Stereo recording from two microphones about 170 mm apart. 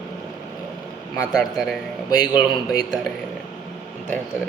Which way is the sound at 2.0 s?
20° left (ahead or behind).